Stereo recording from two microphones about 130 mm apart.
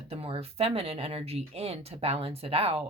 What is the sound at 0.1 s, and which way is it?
Speech, 50° right (ahead or behind).